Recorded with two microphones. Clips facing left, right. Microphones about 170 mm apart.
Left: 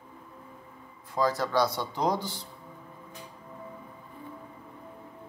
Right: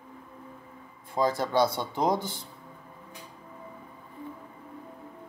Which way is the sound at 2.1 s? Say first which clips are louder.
Right 1 dB; 50° right (ahead or behind).